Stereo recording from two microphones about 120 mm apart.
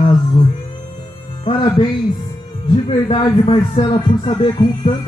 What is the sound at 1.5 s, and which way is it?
A man's voice, 35° left (ahead or behind).